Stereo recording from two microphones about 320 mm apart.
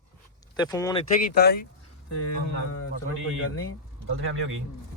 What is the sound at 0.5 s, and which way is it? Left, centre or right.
Speech, centre.